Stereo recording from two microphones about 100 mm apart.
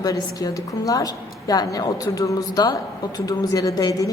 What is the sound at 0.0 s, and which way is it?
A woman's voice, 40° left (ahead or behind).